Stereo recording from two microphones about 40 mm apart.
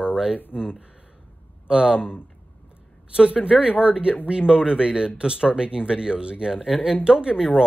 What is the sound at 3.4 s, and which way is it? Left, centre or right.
Speech, right.